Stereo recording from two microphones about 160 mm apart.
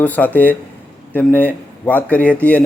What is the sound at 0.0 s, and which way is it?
Speech, 10° left (ahead or behind).